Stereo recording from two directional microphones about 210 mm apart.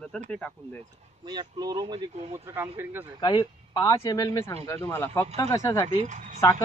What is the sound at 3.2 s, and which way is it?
Speech, 20° left (ahead or behind).